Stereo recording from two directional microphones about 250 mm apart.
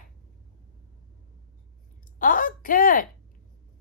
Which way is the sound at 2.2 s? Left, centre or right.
Left.